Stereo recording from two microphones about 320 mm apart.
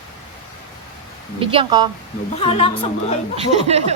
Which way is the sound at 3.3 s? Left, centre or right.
Centre.